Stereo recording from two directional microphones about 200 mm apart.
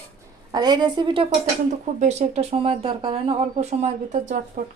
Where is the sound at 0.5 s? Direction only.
20° right (ahead or behind).